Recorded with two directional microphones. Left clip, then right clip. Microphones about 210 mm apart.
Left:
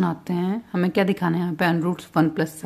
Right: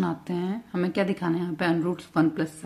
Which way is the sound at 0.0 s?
30° left (ahead or behind).